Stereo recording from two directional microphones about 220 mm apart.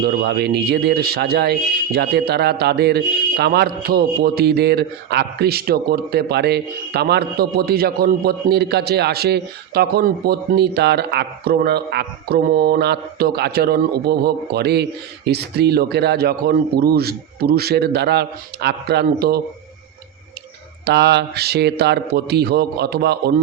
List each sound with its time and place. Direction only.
0.0 s speech: 45° right (ahead or behind)
20.8 s speech: 50° right (ahead or behind)